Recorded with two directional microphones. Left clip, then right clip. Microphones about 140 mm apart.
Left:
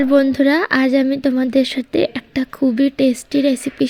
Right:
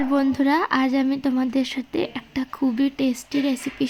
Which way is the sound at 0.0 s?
25° left (ahead or behind).